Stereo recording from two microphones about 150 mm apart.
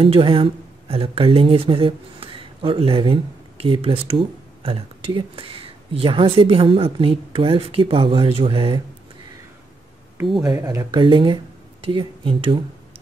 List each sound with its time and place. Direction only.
0.0 s speech: 35° right (ahead or behind)
10.4 s speech: 20° right (ahead or behind)